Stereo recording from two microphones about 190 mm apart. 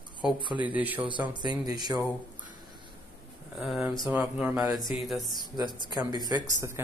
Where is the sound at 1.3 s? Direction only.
25° right (ahead or behind).